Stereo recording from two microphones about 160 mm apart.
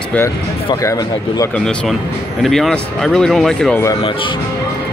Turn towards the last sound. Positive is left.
turn(degrees=35)  # may be behind; listen again after turning